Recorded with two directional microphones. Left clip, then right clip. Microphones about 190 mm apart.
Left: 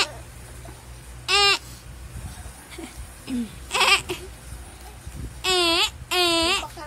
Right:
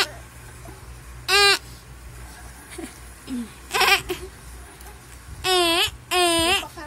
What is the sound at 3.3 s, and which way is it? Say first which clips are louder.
Bleat: left 2 dB; 35° left (ahead or behind).